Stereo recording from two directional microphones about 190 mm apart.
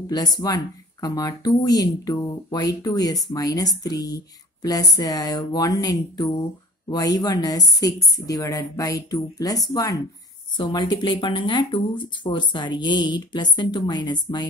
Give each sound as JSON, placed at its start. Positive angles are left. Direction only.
{"t": 0.0, "sound": "speech", "side_deg": 20}